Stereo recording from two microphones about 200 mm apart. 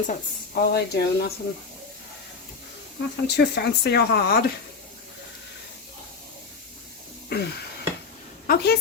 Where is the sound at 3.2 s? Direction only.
55° left (ahead or behind).